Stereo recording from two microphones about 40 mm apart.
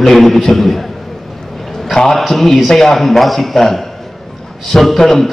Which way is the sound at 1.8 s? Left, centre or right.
Centre.